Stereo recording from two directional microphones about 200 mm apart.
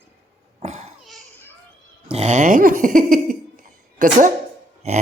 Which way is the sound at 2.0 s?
30° right (ahead or behind).